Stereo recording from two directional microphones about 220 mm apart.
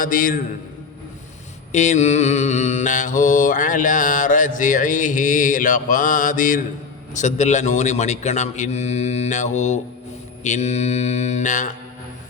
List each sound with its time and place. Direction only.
0.0 s mantra: 35° left (ahead or behind)
1.7 s mantra: 30° left (ahead or behind)